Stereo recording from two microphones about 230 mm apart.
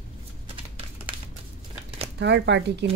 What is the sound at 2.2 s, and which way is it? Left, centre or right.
Speech, right.